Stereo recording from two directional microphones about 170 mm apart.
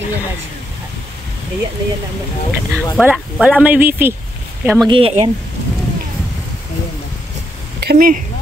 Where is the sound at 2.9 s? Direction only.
Centre (ahead or behind).